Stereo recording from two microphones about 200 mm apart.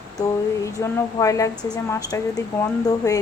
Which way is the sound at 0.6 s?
15° left (ahead or behind).